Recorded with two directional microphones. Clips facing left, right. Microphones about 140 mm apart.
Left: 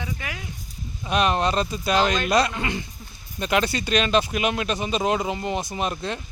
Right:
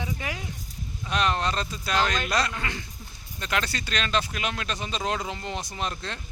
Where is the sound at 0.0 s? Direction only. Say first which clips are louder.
Even; 30° right (ahead or behind).